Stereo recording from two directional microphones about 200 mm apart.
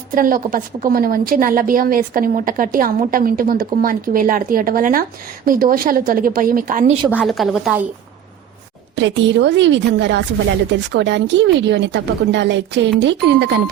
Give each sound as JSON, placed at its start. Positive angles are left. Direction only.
{"t": 0.1, "sound": "a woman's voice", "side_deg": -45}
{"t": 7.1, "sound": "a woman's voice", "side_deg": -5}
{"t": 9.0, "sound": "a woman's voice", "side_deg": -65}